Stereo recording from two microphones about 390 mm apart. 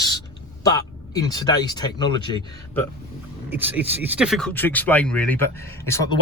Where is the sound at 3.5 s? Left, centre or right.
Centre.